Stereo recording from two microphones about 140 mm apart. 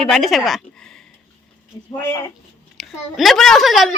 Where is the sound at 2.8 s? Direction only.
Centre (ahead or behind).